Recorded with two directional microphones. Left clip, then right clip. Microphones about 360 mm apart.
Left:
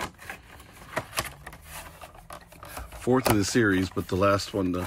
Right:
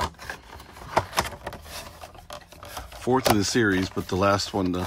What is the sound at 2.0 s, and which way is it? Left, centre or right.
Speech, centre.